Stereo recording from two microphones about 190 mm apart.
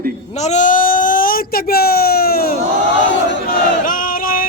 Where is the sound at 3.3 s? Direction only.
50° left (ahead or behind).